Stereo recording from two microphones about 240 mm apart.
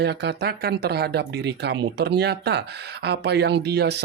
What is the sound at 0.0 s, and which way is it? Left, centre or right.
Speech, right.